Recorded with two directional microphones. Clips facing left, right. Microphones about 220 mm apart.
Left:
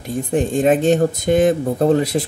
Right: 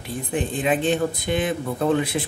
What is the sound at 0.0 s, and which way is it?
Speech, 45° left (ahead or behind).